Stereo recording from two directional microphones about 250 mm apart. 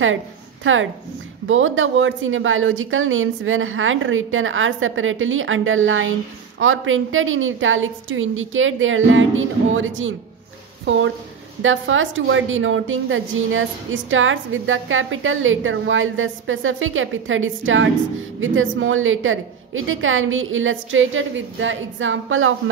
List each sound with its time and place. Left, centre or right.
0.7 s a woman's voice: right
11.6 s a woman's voice: right